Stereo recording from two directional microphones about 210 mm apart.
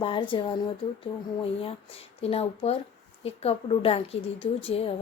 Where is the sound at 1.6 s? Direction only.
30° left (ahead or behind).